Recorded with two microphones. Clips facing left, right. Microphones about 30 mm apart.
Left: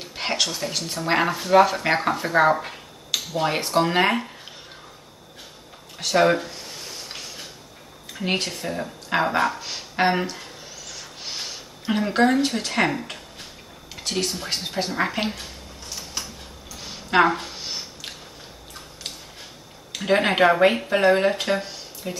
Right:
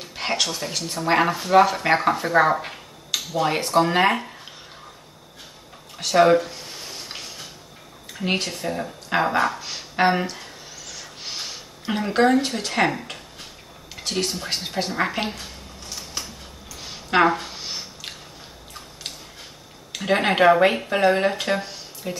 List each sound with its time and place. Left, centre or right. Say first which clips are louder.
0.0 s speech: even; centre
3.1 s a sound: even; centre
3.4 s speech: right 2 dB; centre
5.9 s speech: right 2 dB; centre
8.1 s speech: even; centre
16.8 s a sound: even; centre
19.9 s speech: even; centre